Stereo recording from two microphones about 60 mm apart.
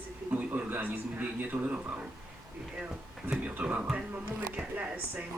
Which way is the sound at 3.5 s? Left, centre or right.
Right.